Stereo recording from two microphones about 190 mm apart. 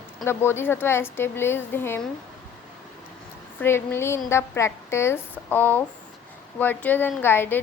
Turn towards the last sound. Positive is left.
turn(degrees=10)  # may be behind; listen again after turning